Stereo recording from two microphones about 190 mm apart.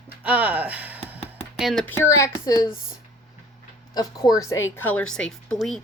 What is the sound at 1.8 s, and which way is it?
Speech, 15° left (ahead or behind).